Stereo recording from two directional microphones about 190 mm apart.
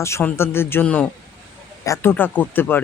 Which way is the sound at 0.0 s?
15° left (ahead or behind).